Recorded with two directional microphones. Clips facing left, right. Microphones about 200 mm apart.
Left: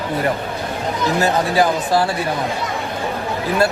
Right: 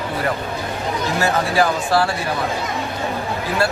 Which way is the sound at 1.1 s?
20° left (ahead or behind).